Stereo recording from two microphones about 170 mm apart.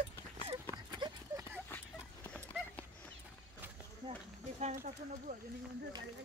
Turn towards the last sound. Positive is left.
turn(degrees=-45)  # may be behind; listen again after turning